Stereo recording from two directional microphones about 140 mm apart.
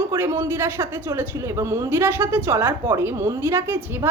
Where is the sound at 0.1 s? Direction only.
20° right (ahead or behind).